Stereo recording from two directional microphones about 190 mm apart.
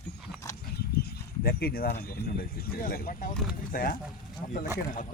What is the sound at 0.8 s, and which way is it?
Speech, 55° left (ahead or behind).